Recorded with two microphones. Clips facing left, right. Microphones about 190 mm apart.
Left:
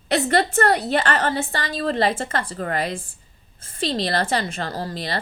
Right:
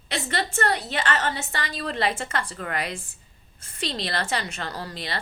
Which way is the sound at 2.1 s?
50° left (ahead or behind).